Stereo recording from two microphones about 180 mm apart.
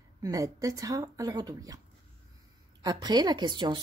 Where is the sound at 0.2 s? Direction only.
20° right (ahead or behind).